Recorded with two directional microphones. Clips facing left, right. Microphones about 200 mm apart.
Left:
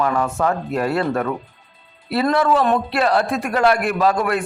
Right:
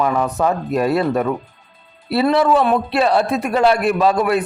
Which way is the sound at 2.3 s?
20° right (ahead or behind).